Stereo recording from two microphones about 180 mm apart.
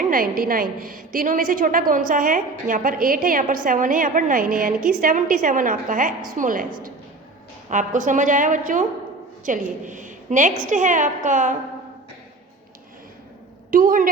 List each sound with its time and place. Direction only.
0.0 s a woman's voice: 50° right (ahead or behind)
7.7 s a woman's voice: 45° right (ahead or behind)
13.7 s a woman's voice: 50° right (ahead or behind)